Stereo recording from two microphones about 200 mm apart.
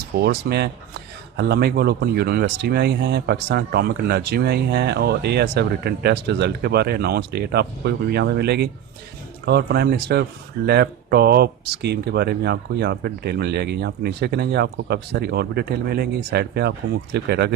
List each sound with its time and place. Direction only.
0.2 s speech: 55° right (ahead or behind)